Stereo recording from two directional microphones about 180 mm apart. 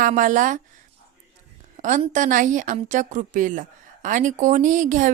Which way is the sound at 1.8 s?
45° right (ahead or behind).